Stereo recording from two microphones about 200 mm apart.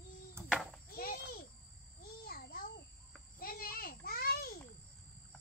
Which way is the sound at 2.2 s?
50° left (ahead or behind).